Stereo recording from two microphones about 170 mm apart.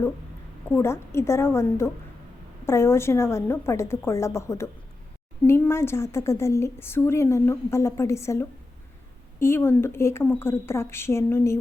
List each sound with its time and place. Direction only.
0.7 s a woman's voice: 15° left (ahead or behind)